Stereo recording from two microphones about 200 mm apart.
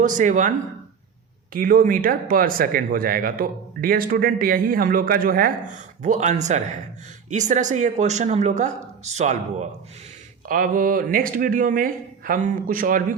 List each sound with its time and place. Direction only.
0.0 s speech: 40° right (ahead or behind)
1.5 s speech: 45° right (ahead or behind)